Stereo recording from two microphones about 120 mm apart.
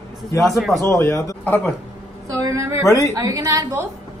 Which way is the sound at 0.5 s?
Centre (ahead or behind).